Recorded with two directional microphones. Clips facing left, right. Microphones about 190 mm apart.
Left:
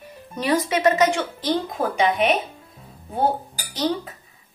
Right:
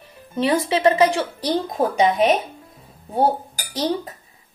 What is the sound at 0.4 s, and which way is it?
A woman's voice, 30° right (ahead or behind).